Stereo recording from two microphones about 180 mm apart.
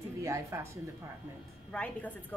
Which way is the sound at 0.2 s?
15° right (ahead or behind).